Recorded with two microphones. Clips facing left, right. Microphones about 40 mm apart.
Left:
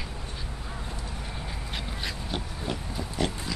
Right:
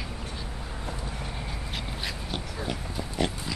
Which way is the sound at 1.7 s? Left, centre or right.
Centre.